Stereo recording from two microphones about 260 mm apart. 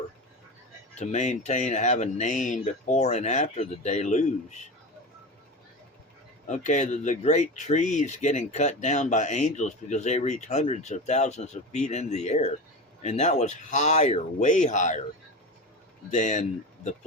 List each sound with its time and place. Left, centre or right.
0.9 s speech: left
6.5 s speech: left
16.0 s speech: left